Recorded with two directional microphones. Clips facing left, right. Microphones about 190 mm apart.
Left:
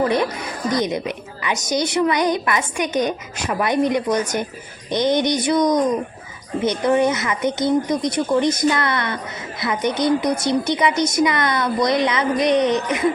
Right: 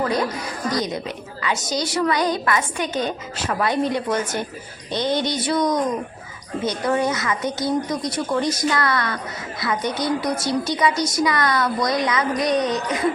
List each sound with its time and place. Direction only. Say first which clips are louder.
0.0 s a woman's voice: left 3 dB; 25° left (ahead or behind)